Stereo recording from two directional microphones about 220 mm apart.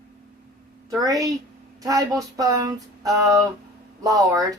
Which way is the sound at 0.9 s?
15° right (ahead or behind).